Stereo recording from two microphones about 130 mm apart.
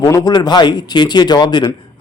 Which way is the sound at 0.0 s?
25° left (ahead or behind).